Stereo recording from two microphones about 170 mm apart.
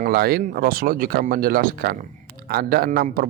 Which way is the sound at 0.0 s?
65° right (ahead or behind).